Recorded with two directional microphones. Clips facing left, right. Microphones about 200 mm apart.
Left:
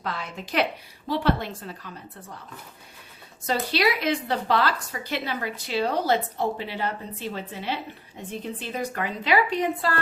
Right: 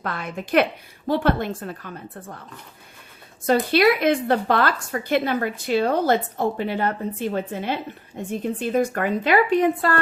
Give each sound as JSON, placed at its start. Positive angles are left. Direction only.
{"t": 0.0, "sound": "speech", "side_deg": -55}
{"t": 3.4, "sound": "speech", "side_deg": -55}